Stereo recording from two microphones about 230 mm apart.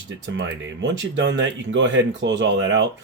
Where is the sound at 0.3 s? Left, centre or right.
Right.